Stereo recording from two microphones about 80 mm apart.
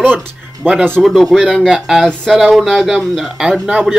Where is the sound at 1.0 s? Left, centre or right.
Centre.